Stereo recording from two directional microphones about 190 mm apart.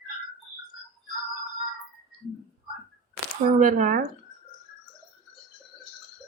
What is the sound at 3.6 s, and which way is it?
Speech, 45° right (ahead or behind).